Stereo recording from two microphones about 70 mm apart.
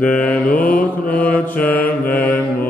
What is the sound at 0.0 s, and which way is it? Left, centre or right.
Mantra, left.